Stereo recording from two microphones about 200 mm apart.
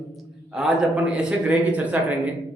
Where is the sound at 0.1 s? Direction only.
Centre (ahead or behind).